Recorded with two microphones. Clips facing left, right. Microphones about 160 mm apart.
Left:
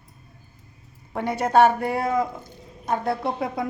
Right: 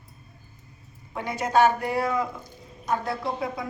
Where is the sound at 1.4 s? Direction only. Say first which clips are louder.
Left 3 dB; 60° left (ahead or behind).